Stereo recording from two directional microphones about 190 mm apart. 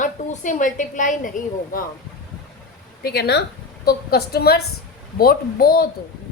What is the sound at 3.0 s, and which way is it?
A woman's voice, 60° left (ahead or behind).